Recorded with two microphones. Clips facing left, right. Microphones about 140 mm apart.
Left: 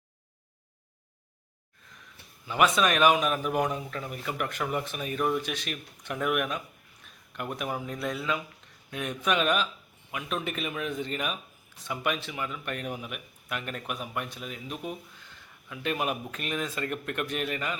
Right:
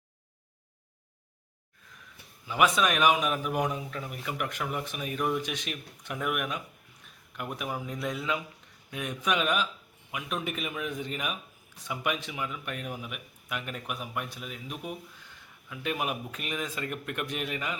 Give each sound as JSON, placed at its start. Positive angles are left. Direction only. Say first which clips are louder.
{"t": 2.5, "sound": "speech", "louder": "left 1 dB", "side_deg": -10}